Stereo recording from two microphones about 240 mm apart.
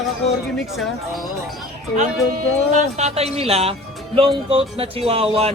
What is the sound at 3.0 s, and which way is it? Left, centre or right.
Speech, right.